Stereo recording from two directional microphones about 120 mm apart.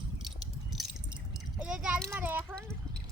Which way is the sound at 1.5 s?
10° right (ahead or behind).